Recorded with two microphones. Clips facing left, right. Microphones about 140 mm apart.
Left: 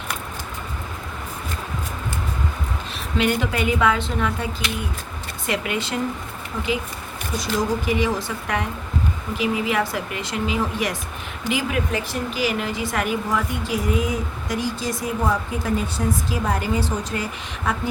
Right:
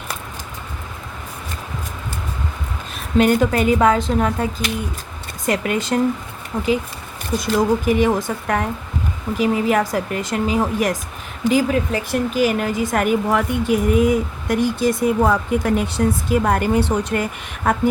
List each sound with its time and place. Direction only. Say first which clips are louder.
3.2 s speech: right 7 dB; 45° right (ahead or behind)
7.4 s speech: right 6 dB; 50° right (ahead or behind)
12.4 s speech: right 5 dB; 50° right (ahead or behind)
17.7 s speech: right 6 dB; 50° right (ahead or behind)